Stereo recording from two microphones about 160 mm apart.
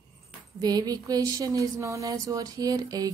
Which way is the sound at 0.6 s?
25° right (ahead or behind).